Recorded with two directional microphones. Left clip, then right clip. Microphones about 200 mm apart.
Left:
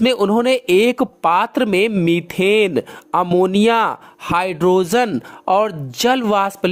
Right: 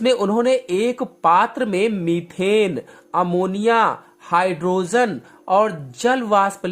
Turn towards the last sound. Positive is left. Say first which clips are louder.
# left 1 dB
turn(degrees=40)  # may be behind; listen again after turning